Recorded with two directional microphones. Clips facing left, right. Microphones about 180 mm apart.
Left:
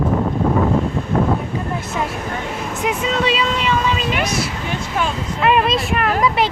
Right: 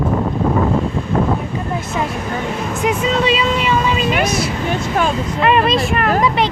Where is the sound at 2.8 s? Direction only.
Centre (ahead or behind).